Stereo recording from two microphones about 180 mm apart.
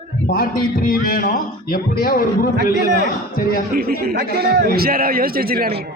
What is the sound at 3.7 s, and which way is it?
A man's voice, 60° right (ahead or behind).